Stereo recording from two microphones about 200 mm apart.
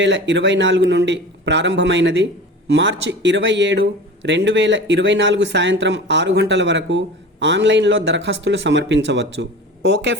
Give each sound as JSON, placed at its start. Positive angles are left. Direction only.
{"t": 0.0, "sound": "speech", "side_deg": -65}